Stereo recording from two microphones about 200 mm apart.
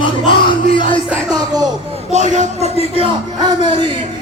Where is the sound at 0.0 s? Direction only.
25° left (ahead or behind).